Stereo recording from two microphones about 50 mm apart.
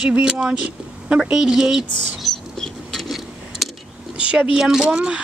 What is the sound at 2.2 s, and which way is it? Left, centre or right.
Rodents, centre.